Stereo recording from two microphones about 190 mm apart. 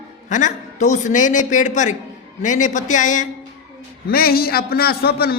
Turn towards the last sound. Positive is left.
turn(degrees=55)  # may be behind; listen again after turning